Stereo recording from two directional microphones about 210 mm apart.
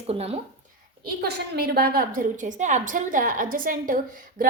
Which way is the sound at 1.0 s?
50° right (ahead or behind).